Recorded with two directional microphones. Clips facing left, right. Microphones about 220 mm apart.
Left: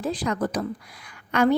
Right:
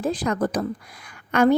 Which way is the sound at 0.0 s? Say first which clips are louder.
Right 3 dB; 45° right (ahead or behind).